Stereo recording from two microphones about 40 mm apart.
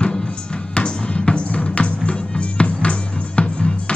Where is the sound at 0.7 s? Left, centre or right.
Left.